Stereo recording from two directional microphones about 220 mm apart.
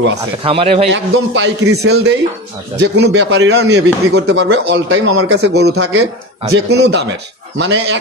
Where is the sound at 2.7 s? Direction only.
50° right (ahead or behind).